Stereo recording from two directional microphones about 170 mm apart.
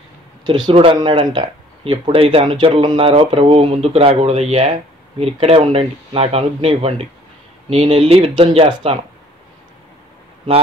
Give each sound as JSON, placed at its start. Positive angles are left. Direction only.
{"t": 0.5, "sound": "speech", "side_deg": -30}